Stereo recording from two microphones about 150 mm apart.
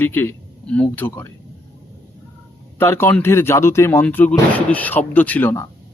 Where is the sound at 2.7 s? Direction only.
15° left (ahead or behind).